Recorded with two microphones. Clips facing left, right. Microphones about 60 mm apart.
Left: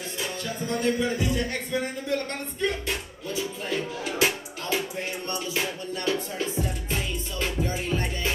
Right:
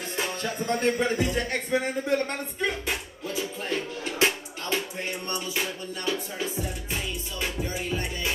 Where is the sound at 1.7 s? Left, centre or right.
Right.